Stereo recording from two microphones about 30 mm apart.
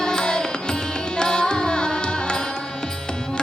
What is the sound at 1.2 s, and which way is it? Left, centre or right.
Carnatic music, left.